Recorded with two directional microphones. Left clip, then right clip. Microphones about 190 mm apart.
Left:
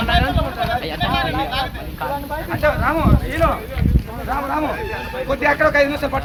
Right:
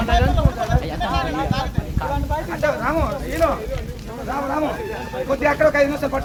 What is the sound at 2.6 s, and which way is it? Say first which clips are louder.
Speech: left 3 dB; 60° right (ahead or behind).